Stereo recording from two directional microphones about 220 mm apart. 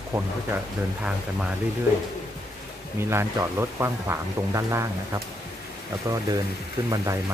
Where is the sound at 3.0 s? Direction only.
10° right (ahead or behind).